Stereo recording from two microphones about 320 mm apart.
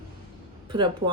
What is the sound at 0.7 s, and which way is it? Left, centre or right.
Speech, centre.